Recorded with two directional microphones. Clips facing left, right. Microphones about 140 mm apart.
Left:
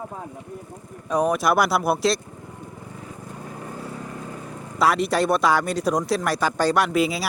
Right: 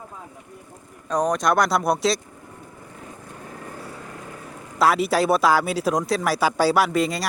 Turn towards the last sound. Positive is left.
turn(degrees=5)  # may be behind; listen again after turning